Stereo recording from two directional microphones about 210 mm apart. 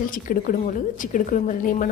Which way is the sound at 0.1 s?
40° left (ahead or behind).